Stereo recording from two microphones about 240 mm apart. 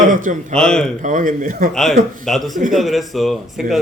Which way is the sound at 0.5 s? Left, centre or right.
Centre.